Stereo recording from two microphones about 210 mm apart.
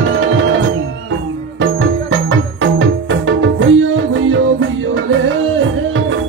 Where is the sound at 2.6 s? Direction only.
65° right (ahead or behind).